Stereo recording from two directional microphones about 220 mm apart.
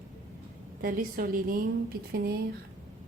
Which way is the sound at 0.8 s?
40° right (ahead or behind).